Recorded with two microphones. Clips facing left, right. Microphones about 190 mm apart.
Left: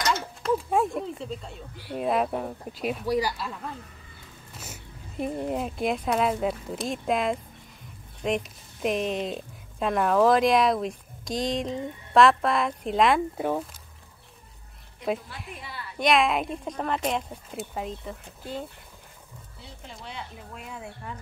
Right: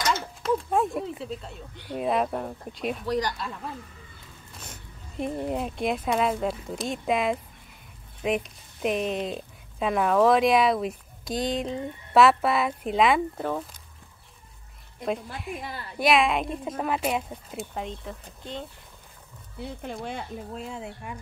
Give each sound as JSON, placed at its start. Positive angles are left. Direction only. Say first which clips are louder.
{"t": 0.0, "sound": "speech", "louder": "even", "side_deg": 0}
{"t": 15.6, "sound": "a woman's voice", "louder": "right 3 dB", "side_deg": -45}
{"t": 16.0, "sound": "speech", "louder": "even", "side_deg": 0}
{"t": 19.6, "sound": "speech", "louder": "right 10 dB", "side_deg": -55}
{"t": 20.5, "sound": "speech", "louder": "right 2 dB", "side_deg": -30}